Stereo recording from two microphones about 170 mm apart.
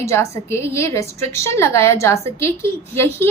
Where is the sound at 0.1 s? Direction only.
15° left (ahead or behind).